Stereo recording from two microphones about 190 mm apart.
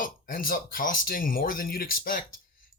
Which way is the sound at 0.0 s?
45° left (ahead or behind).